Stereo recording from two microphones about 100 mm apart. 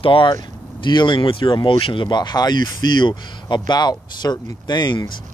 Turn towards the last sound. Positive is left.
turn(degrees=45)  # may be behind; listen again after turning